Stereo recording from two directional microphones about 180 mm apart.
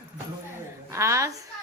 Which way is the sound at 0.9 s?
15° right (ahead or behind).